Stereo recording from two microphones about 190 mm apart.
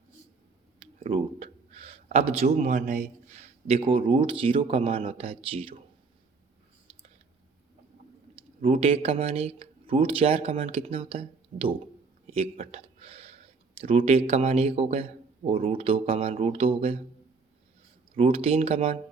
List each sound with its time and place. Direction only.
0.8 s speech: 30° right (ahead or behind)
8.4 s speech: 30° right (ahead or behind)
12.3 s a sound: 30° right (ahead or behind)
13.7 s speech: 30° right (ahead or behind)
18.1 s speech: 30° right (ahead or behind)